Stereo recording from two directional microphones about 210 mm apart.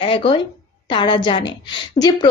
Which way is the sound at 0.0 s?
25° left (ahead or behind).